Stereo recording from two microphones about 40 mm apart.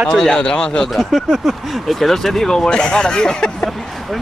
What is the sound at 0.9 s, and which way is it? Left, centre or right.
Speech, centre.